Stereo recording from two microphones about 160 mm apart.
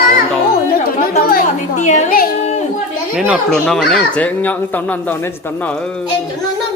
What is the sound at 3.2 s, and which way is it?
A child's voice, 5° right (ahead or behind).